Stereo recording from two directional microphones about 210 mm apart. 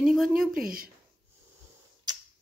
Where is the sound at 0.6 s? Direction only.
45° right (ahead or behind).